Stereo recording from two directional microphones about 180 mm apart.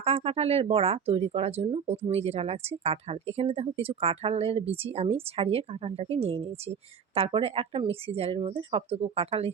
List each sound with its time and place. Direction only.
0.0 s a woman's voice: 35° right (ahead or behind)